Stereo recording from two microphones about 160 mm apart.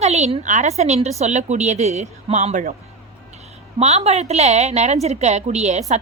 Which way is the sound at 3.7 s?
40° right (ahead or behind).